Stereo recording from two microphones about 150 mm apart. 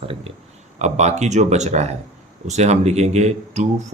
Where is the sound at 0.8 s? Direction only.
50° right (ahead or behind).